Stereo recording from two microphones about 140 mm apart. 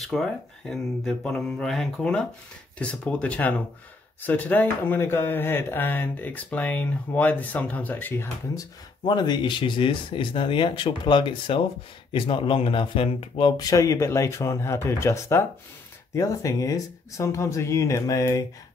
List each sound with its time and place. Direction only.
0.0 s speech: centre (ahead or behind)
8.5 s speech: 30° left (ahead or behind)